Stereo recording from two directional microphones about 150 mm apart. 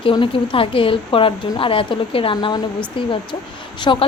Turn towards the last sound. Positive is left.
turn(degrees=30)  # may be behind; listen again after turning